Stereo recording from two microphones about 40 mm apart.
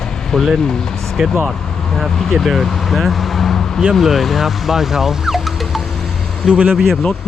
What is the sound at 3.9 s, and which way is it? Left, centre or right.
Speech, centre.